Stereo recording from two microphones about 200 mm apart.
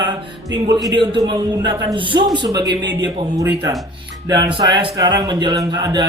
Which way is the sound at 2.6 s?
65° right (ahead or behind).